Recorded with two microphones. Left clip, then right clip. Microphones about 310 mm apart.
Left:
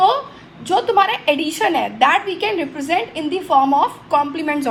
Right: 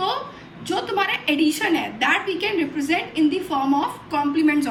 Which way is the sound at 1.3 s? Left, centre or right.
Left.